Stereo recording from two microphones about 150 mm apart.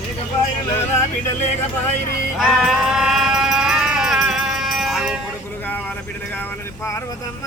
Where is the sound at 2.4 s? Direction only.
5° right (ahead or behind).